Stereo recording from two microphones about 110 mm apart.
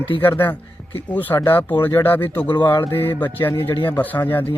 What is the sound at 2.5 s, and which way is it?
Speech, 45° left (ahead or behind).